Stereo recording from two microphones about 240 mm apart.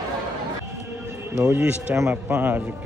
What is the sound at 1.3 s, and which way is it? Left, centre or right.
Speech, centre.